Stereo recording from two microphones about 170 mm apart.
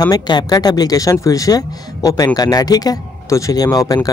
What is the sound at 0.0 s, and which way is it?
Speech, 25° left (ahead or behind).